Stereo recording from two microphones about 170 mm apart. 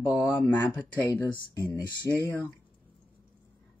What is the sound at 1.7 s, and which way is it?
Speech, 20° right (ahead or behind).